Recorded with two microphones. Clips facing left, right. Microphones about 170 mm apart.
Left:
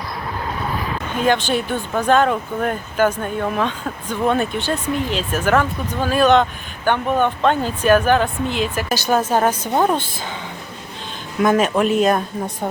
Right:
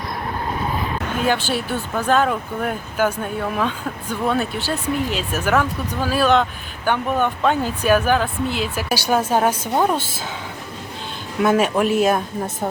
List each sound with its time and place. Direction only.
1.2 s speech: 5° right (ahead or behind)
11.4 s speech: 5° right (ahead or behind)